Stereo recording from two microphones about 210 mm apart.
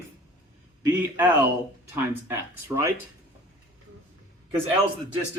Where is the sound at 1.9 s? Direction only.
10° right (ahead or behind).